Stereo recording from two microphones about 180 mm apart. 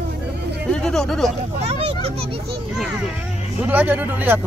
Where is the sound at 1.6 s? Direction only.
35° right (ahead or behind).